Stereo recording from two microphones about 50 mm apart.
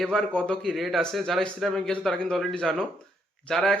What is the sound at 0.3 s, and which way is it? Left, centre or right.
Speech, centre.